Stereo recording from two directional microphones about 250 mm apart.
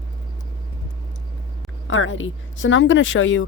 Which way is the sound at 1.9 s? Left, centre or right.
Left.